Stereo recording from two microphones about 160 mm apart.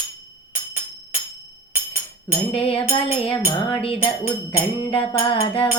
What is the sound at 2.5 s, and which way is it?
Music, 35° left (ahead or behind).